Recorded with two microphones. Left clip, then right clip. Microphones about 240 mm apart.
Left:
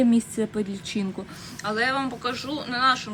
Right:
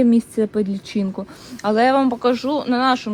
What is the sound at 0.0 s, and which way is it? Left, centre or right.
Speech, centre.